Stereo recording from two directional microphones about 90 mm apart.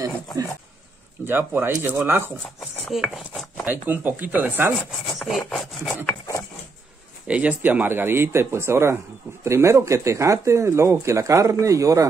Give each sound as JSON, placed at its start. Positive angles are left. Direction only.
{"t": 1.2, "sound": "speech", "side_deg": -25}
{"t": 2.9, "sound": "rub", "side_deg": 0}
{"t": 3.6, "sound": "speech", "side_deg": -20}
{"t": 5.2, "sound": "rub", "side_deg": 5}
{"t": 7.2, "sound": "speech", "side_deg": -15}